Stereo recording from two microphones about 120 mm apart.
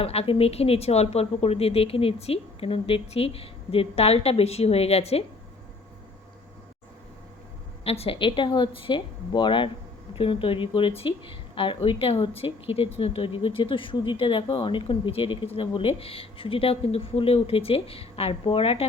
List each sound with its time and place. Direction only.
0.0 s speech: 55° left (ahead or behind)
7.9 s speech: 55° left (ahead or behind)